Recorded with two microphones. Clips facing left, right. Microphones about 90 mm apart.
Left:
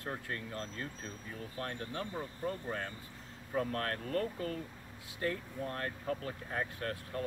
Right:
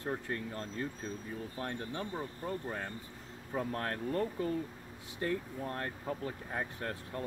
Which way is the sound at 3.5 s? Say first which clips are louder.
Left 1 dB; 25° right (ahead or behind).